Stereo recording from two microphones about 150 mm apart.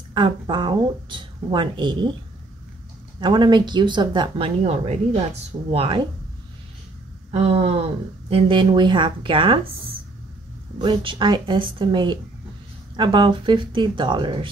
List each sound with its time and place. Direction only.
0.1 s speech: 30° right (ahead or behind)
3.2 s speech: 30° right (ahead or behind)
4.6 s speech: 45° right (ahead or behind)
7.2 s speech: 40° right (ahead or behind)
10.8 s speech: 35° right (ahead or behind)